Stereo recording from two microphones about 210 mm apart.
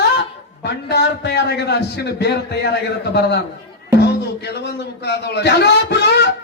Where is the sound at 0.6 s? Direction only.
55° left (ahead or behind).